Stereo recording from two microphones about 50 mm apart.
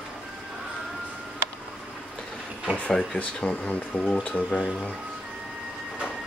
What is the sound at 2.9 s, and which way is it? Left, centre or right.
Speech, centre.